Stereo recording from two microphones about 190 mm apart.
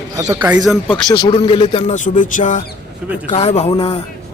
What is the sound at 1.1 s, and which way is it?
Speech, 30° left (ahead or behind).